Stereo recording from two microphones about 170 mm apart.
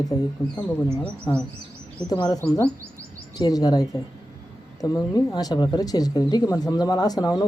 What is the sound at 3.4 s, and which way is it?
Speech, 20° left (ahead or behind).